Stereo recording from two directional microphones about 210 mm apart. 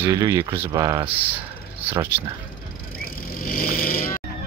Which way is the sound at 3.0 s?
45° left (ahead or behind).